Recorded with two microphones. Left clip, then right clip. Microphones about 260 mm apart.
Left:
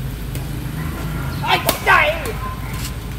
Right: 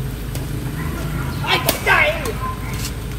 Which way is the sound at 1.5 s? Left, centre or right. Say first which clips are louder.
Left 2 dB; left.